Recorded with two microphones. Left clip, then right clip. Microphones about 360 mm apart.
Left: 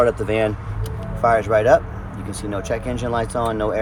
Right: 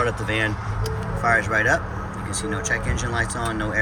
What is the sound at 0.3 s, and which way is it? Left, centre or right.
Speech, centre.